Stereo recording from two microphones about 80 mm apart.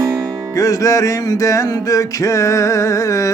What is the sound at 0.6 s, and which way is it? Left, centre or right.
Music, left.